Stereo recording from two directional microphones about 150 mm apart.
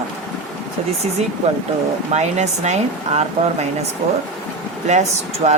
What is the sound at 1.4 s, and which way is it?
Speech, 45° right (ahead or behind).